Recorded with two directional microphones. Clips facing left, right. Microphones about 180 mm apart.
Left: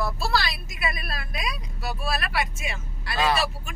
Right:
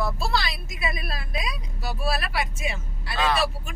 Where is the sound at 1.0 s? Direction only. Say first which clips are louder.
Right 1 dB; 25° right (ahead or behind).